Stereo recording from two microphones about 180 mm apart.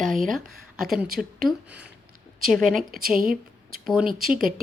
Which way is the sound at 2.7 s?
55° right (ahead or behind).